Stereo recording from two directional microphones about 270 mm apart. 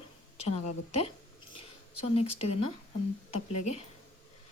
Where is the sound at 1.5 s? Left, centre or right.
Left.